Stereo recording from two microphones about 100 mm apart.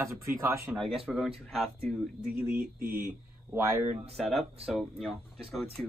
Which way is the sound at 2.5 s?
25° right (ahead or behind).